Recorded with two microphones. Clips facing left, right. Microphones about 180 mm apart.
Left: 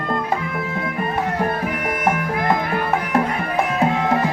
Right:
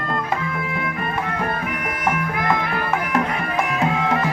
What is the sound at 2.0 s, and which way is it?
Music, 30° left (ahead or behind).